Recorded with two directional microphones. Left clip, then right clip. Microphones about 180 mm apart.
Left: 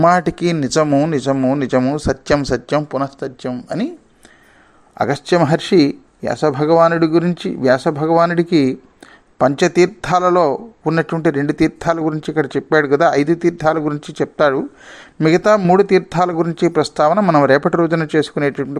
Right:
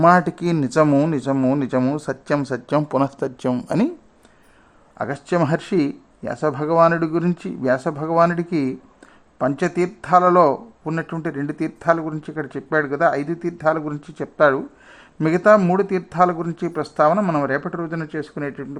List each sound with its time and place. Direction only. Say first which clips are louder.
0.0 s a man's voice: left 2 dB; 20° left (ahead or behind)
0.9 s speech: left 3 dB; centre (ahead or behind)
1.1 s a man's voice: left 4 dB; 15° left (ahead or behind)
2.9 s speech: even; 5° right (ahead or behind)
4.9 s a man's voice: left 6 dB; 20° left (ahead or behind)